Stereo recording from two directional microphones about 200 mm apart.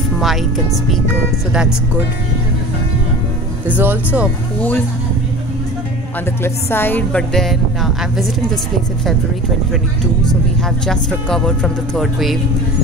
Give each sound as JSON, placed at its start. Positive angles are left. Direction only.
{"t": 0.2, "sound": "speech", "side_deg": 0}
{"t": 1.5, "sound": "speech", "side_deg": -5}
{"t": 3.6, "sound": "speech", "side_deg": -10}
{"t": 6.4, "sound": "speech", "side_deg": 10}
{"t": 10.9, "sound": "speech", "side_deg": 5}